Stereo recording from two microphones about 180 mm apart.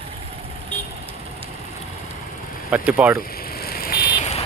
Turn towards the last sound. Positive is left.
turn(degrees=35)  # may be behind; listen again after turning